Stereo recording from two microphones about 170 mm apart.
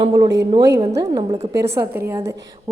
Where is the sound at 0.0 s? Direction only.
25° right (ahead or behind).